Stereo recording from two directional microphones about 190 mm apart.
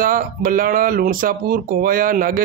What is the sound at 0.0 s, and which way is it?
A man's voice, 45° right (ahead or behind).